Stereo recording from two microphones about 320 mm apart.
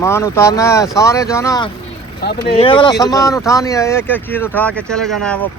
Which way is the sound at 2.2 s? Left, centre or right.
Left.